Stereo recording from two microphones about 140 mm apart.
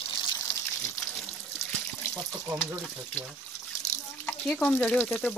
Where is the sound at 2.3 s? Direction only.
20° right (ahead or behind).